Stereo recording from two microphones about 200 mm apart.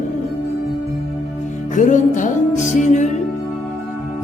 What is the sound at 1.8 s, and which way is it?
Music, 40° left (ahead or behind).